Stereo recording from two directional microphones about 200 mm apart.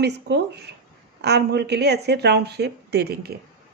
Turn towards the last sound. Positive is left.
turn(degrees=-55)  # may be behind; listen again after turning